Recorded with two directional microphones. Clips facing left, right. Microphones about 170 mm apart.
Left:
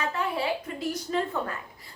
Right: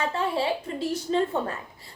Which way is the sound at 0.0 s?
30° right (ahead or behind).